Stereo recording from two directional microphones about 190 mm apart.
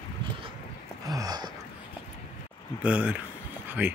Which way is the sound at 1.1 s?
20° right (ahead or behind).